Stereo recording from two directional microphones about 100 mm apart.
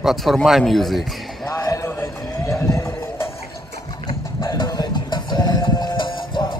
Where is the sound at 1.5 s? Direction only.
35° left (ahead or behind).